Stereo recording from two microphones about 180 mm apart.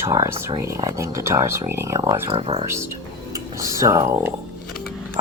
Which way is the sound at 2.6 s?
15° right (ahead or behind).